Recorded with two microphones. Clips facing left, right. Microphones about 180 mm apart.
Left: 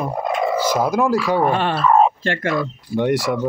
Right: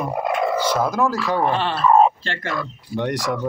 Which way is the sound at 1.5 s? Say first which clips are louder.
Left 3 dB; 50° left (ahead or behind).